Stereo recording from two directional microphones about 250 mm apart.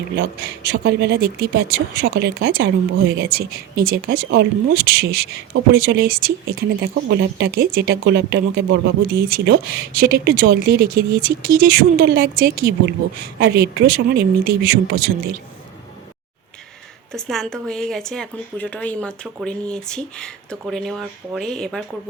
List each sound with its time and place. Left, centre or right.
0.2 s speech: right
17.1 s a woman's voice: centre